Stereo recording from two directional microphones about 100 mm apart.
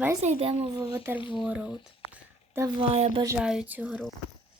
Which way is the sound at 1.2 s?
55° left (ahead or behind).